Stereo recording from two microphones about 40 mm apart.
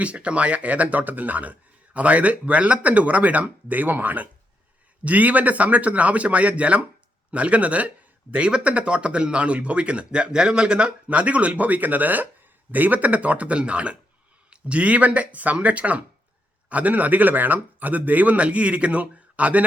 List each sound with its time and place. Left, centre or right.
0.0 s speech: right
11.1 s speech: right